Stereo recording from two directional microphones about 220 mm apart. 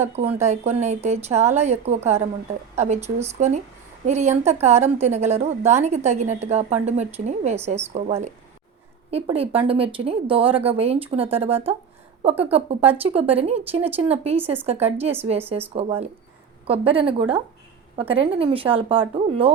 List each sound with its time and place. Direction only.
0.0 s a woman's voice: 30° right (ahead or behind)
16.6 s speech: 25° right (ahead or behind)